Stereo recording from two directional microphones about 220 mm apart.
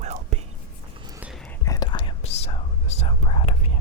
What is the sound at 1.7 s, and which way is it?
Whispering, 20° left (ahead or behind).